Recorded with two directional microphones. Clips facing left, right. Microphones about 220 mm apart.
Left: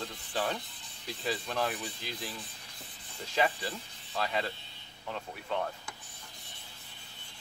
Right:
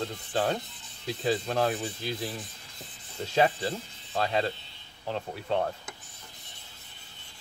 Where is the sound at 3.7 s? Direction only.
35° right (ahead or behind).